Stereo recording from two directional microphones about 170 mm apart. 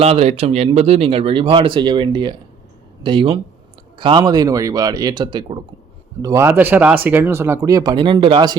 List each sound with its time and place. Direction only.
0.0 s speech: 40° right (ahead or behind)
6.2 s speech: 15° right (ahead or behind)